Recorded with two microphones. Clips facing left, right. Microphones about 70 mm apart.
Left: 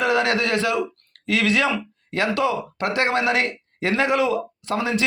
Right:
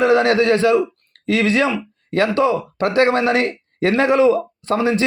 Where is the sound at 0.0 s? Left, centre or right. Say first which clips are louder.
Right 6 dB; right.